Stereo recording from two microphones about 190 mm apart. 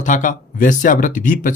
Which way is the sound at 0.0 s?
40° left (ahead or behind).